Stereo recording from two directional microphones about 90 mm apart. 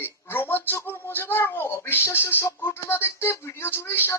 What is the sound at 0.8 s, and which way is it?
Speech, 25° left (ahead or behind).